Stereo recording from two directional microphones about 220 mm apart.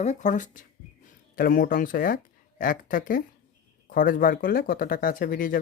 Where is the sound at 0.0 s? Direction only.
35° left (ahead or behind).